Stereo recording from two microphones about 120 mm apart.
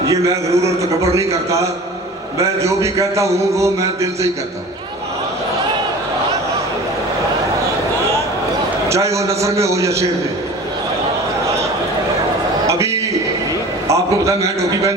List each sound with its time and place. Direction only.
0.0 s a man's voice: 25° right (ahead or behind)
8.9 s a man's voice: 25° right (ahead or behind)
12.6 s a sound: 25° right (ahead or behind)
13.8 s a man's voice: 25° right (ahead or behind)